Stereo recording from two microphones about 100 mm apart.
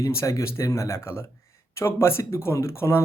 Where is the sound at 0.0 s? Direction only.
30° left (ahead or behind).